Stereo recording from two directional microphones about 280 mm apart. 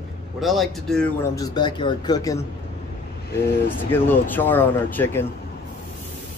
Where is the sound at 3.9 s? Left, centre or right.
Centre.